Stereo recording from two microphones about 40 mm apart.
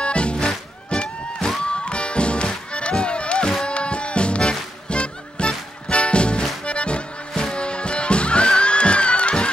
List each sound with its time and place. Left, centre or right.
0.0 s music: left
6.6 s accordion: left
7.5 s music: left